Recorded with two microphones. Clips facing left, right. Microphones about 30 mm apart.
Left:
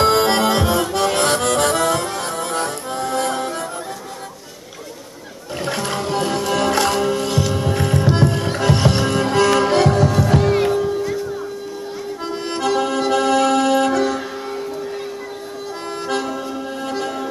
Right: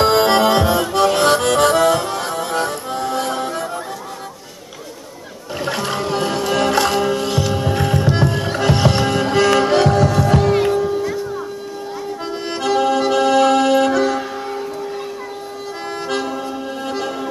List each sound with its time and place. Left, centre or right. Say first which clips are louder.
0.0 s accordion: right 2 dB; centre
5.6 s music: right 1 dB; centre
12.3 s music: even; centre
16.1 s music: even; centre